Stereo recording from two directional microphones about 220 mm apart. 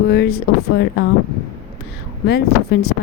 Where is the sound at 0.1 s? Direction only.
50° left (ahead or behind).